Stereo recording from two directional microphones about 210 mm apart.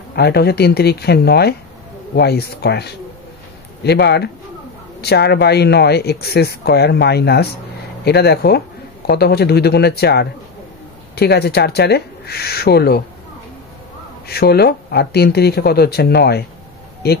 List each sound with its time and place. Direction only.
0.1 s a man's voice: 50° left (ahead or behind)
14.2 s speech: 50° left (ahead or behind)